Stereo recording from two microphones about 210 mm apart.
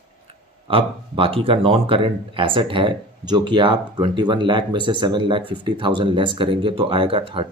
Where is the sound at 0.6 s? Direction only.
25° right (ahead or behind).